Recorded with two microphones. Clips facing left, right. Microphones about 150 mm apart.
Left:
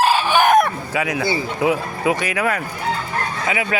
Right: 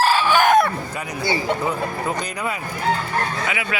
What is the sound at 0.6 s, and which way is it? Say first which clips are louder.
Speech: left 3 dB; 90° left.